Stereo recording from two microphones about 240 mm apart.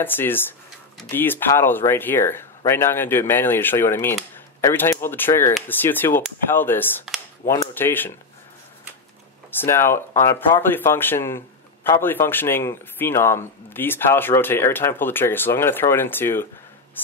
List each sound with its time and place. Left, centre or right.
0.0 s speech: centre
9.5 s speech: centre